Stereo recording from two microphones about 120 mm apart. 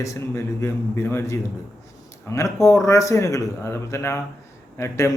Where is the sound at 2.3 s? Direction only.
25° left (ahead or behind).